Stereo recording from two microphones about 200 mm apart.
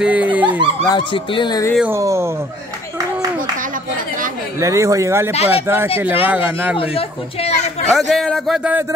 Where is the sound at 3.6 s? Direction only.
40° right (ahead or behind).